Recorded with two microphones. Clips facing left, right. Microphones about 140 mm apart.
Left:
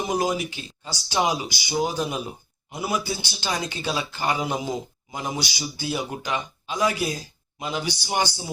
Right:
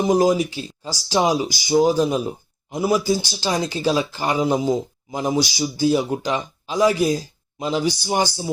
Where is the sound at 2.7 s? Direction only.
35° right (ahead or behind).